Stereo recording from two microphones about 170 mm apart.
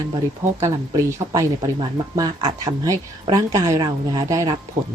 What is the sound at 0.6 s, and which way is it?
A woman's voice, 20° right (ahead or behind).